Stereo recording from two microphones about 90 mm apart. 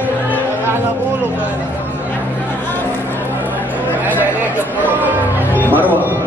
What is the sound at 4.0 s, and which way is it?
Music, 20° right (ahead or behind).